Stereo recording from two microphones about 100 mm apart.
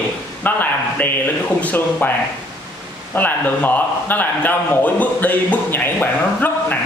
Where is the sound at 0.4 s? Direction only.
20° left (ahead or behind).